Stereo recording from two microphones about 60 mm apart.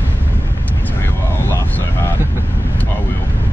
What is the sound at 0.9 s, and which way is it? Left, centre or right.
Vehicle, left.